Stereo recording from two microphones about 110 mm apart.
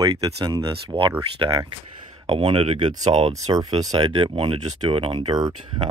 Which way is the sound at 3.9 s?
55° right (ahead or behind).